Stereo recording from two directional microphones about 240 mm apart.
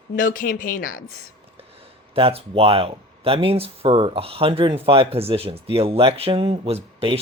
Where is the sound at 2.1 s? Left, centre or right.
Right.